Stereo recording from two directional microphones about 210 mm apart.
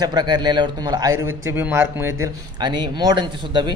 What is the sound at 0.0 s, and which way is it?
A man's voice, 20° right (ahead or behind).